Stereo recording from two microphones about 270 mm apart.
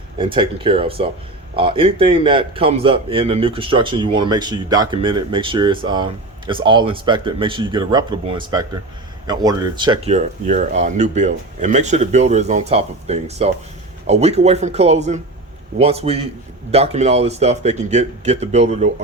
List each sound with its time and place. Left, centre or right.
0.2 s a man's voice: centre